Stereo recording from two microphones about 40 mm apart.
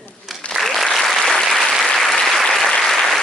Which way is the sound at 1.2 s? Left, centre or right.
Centre.